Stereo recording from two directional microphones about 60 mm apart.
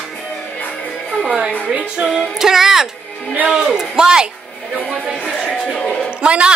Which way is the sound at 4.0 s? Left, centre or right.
Centre.